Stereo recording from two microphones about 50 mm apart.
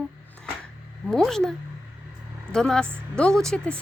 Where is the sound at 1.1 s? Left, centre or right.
Centre.